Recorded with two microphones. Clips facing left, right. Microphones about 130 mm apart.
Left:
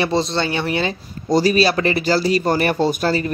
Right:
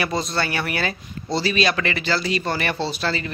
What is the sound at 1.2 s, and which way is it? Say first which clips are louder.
Speech: left 6 dB; 45° left (ahead or behind).